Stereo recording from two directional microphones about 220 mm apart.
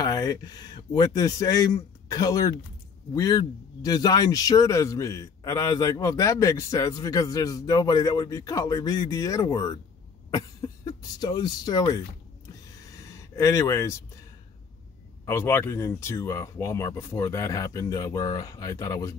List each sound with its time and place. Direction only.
0.0 s a man's voice: 15° left (ahead or behind)
12.9 s a sound: 15° left (ahead or behind)
15.2 s a man's voice: 10° left (ahead or behind)